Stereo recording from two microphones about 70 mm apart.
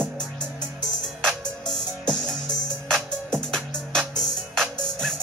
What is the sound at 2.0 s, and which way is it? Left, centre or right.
Music, centre.